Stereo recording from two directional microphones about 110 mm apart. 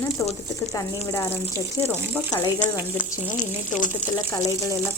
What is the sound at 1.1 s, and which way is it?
Speech, 25° left (ahead or behind).